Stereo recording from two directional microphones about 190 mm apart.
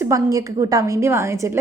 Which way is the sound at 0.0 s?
15° right (ahead or behind).